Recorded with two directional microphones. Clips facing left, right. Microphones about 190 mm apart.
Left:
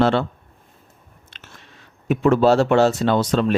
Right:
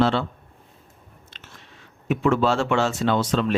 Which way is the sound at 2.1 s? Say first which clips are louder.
Left 5 dB; 40° left (ahead or behind).